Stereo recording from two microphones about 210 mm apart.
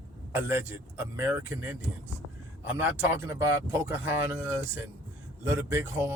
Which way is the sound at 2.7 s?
10° right (ahead or behind).